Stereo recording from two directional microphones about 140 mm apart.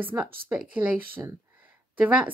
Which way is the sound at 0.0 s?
15° right (ahead or behind).